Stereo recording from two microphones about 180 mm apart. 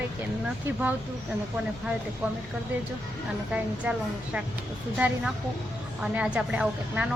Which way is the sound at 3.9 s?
10° right (ahead or behind).